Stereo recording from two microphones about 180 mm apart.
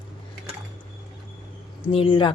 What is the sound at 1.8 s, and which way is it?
Speech, 30° left (ahead or behind).